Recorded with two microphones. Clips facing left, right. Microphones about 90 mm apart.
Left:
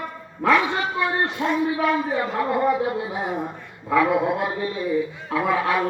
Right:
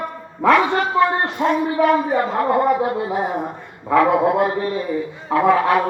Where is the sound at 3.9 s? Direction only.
50° right (ahead or behind).